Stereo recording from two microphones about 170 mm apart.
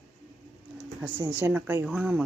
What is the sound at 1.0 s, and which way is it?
Speech, 10° right (ahead or behind).